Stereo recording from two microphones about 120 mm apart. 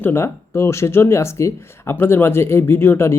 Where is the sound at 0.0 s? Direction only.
20° left (ahead or behind).